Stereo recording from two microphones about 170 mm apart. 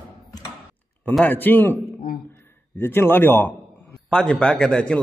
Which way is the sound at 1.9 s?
60° left (ahead or behind).